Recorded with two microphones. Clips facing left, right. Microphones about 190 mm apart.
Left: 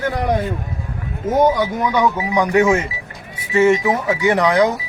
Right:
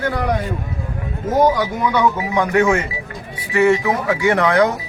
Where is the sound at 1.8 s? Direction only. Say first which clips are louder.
Even; 15° left (ahead or behind).